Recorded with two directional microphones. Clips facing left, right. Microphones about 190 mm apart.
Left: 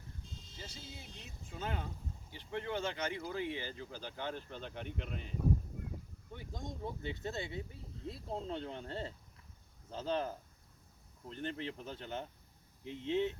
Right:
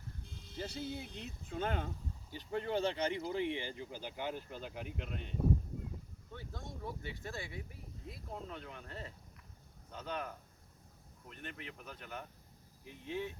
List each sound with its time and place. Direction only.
0.2 s speech: 60° right (ahead or behind)
2.3 s speech: 35° right (ahead or behind); by 5.4 s centre (ahead or behind)
6.3 s speech: 15° left (ahead or behind)